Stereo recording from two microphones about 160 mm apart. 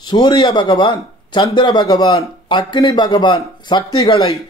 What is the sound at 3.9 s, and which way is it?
Speech, 35° left (ahead or behind).